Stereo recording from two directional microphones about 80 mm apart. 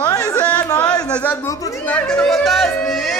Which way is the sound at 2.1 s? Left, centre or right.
Centre.